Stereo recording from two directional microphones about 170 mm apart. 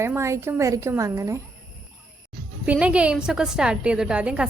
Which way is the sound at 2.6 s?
5° right (ahead or behind).